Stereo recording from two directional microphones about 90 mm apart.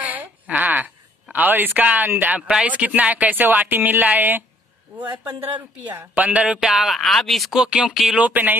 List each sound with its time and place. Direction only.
0.0 s a sound: 20° right (ahead or behind)
1.3 s speech: 20° right (ahead or behind)
4.9 s a man's voice: 40° right (ahead or behind)
5.9 s speech: 15° right (ahead or behind); by 7.6 s centre (ahead or behind)
7.6 s speech: 10° right (ahead or behind)
8.2 s speech: 20° right (ahead or behind)